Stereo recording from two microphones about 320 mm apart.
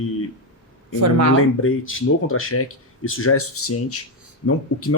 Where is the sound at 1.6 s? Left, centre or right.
Left.